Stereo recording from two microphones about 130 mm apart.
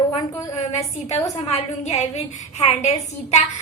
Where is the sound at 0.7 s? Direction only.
55° left (ahead or behind).